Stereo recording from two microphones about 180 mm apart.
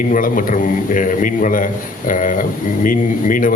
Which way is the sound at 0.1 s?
50° left (ahead or behind).